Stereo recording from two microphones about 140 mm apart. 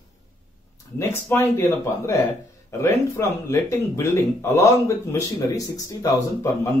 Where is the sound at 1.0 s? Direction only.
15° left (ahead or behind).